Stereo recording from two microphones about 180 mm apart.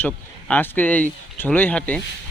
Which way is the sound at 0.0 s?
10° left (ahead or behind).